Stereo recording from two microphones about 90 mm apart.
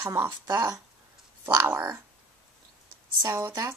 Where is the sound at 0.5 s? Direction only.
45° right (ahead or behind).